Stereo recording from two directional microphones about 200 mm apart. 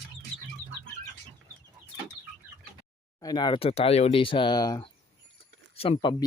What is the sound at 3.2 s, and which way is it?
Speech, 20° left (ahead or behind).